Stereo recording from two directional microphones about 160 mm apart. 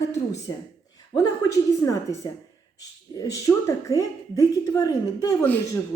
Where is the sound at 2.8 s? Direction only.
20° left (ahead or behind).